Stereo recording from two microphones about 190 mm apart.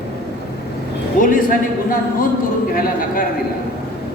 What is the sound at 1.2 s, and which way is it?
Speech, 45° left (ahead or behind).